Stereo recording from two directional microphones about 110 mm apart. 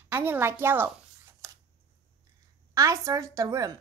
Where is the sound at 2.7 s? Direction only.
30° right (ahead or behind).